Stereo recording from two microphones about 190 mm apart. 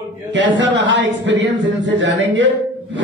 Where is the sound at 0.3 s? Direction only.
75° right (ahead or behind).